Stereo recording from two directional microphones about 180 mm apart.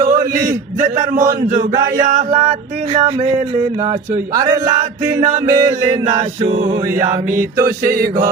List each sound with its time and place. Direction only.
0.1 s a man's voice: 45° right (ahead or behind)
4.4 s a sound: 20° right (ahead or behind)
5.5 s mantra: 15° right (ahead or behind)
7.0 s mantra: 15° right (ahead or behind)
7.9 s a man's voice: 55° right (ahead or behind)